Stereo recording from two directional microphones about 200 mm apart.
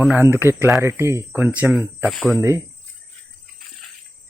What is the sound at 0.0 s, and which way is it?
Speech, 10° right (ahead or behind).